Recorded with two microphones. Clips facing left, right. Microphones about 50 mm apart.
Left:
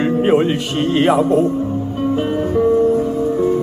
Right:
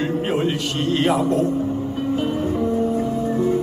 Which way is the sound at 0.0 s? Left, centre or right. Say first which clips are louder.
Left 7 dB; centre.